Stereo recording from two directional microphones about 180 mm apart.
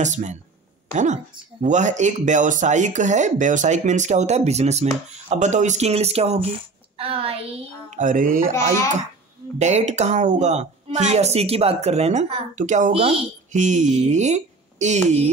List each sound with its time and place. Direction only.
0.0 s speech: 40° right (ahead or behind)
9.6 s speech: 40° right (ahead or behind)